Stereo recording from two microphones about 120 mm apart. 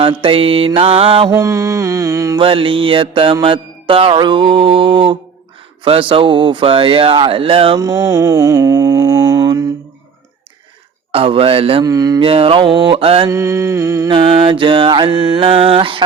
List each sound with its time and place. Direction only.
0.0 s speech: 45° right (ahead or behind)
1.3 s mantra: 25° right (ahead or behind)
2.3 s speech: 50° right (ahead or behind)
7.8 s mantra: 30° right (ahead or behind)
11.1 s speech: 50° right (ahead or behind)
11.8 s mantra: 30° right (ahead or behind)
12.2 s speech: 50° right (ahead or behind)
13.2 s mantra: 25° right (ahead or behind)
14.1 s speech: 50° right (ahead or behind)